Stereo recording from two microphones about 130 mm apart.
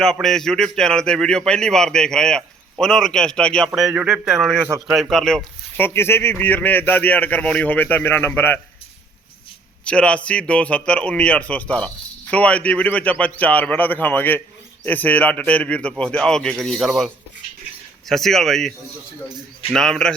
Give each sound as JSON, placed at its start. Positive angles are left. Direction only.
{"t": 0.0, "sound": "a man's voice", "side_deg": 5}
{"t": 3.7, "sound": "a man's voice", "side_deg": -5}
{"t": 5.8, "sound": "a man's voice", "side_deg": 20}
{"t": 9.8, "sound": "a man's voice", "side_deg": 10}
{"t": 19.7, "sound": "a man's voice", "side_deg": 5}